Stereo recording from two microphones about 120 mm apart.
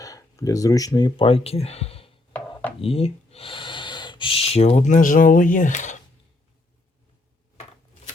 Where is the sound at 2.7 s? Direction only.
55° left (ahead or behind); by 6.0 s 90° left.